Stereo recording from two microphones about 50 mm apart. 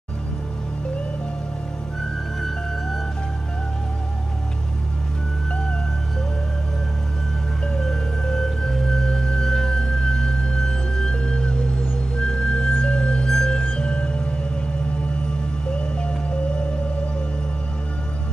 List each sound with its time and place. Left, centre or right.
7.6 s music: centre